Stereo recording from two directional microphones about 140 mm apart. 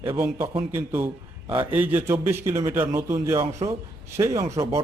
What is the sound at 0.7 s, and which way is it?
A man's voice, 15° right (ahead or behind).